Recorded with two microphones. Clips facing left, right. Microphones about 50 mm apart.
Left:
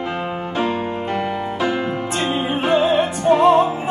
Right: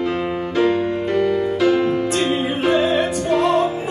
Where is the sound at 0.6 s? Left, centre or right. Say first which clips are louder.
Right 5 dB; left.